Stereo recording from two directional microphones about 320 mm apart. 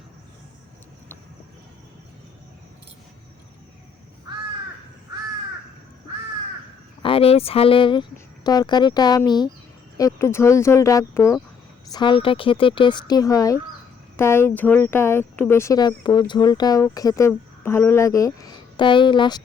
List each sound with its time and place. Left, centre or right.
7.0 s speech: centre